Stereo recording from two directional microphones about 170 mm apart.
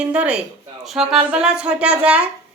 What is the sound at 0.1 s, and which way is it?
A woman's voice, 5° right (ahead or behind).